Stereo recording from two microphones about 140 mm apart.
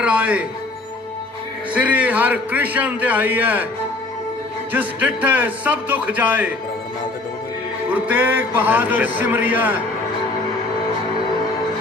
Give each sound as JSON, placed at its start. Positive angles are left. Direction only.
{"t": 0.0, "sound": "music", "side_deg": -10}
{"t": 1.7, "sound": "a man's voice", "side_deg": -10}
{"t": 4.7, "sound": "a man's voice", "side_deg": -10}
{"t": 7.9, "sound": "a man's voice", "side_deg": -10}